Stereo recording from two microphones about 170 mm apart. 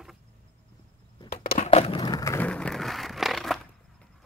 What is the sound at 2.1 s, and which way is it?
Vehicle, 20° left (ahead or behind).